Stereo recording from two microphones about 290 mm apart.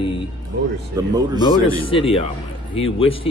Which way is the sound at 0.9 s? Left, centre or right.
Centre.